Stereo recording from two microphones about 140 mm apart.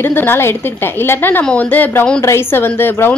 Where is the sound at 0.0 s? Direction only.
15° left (ahead or behind).